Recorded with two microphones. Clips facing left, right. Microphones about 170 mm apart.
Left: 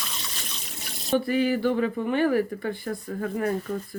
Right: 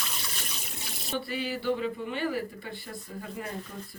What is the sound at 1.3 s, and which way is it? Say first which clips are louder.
Speech: left 5 dB; 50° left (ahead or behind).